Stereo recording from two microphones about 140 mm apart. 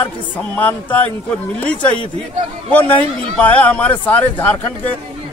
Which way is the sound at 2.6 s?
10° left (ahead or behind).